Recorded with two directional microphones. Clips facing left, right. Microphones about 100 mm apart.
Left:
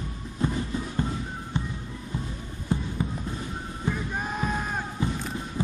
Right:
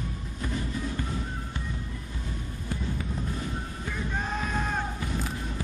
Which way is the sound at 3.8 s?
10° left (ahead or behind).